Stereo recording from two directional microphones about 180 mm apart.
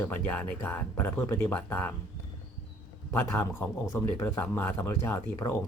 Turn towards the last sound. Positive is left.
turn(degrees=15)  # may be behind; listen again after turning